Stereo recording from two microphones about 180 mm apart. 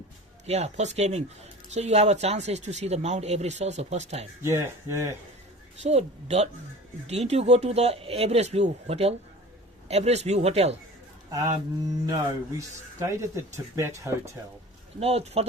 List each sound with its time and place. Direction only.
0.4 s speech: 35° right (ahead or behind)
4.4 s speech: 15° right (ahead or behind)
5.7 s speech: 35° right (ahead or behind)
12.0 s speech: 20° right (ahead or behind)
14.9 s speech: 35° right (ahead or behind)